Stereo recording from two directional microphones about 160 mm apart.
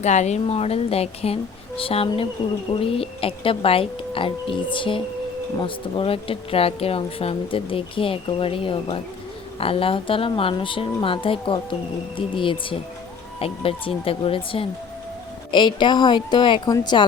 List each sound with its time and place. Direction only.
0.0 s speech: 45° left (ahead or behind); by 17.1 s 25° left (ahead or behind)